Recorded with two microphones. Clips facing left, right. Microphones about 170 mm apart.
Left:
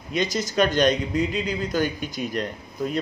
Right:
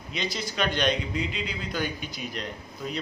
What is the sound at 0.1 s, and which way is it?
Speech, 45° left (ahead or behind).